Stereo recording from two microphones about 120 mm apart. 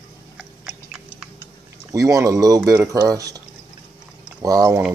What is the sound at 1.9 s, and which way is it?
Speech, 25° right (ahead or behind).